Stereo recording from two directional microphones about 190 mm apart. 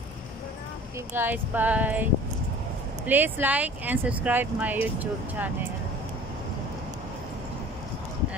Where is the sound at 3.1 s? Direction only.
10° right (ahead or behind).